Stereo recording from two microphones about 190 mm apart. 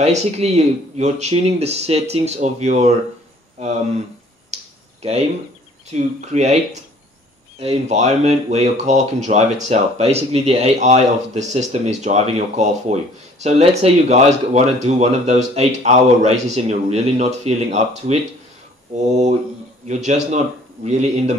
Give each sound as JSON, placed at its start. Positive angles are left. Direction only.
{"t": 0.0, "sound": "speech", "side_deg": -35}
{"t": 5.9, "sound": "speech", "side_deg": -35}